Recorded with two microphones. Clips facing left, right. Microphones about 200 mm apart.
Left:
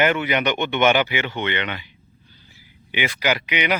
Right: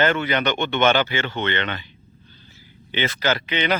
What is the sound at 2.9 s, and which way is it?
Speech, 10° left (ahead or behind).